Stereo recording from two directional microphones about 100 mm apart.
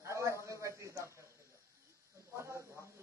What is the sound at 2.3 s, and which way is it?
Snake, 25° right (ahead or behind).